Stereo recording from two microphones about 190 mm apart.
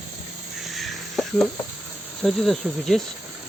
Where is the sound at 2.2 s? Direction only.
Centre (ahead or behind).